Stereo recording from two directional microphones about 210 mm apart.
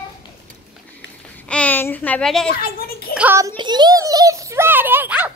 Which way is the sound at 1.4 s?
5° left (ahead or behind).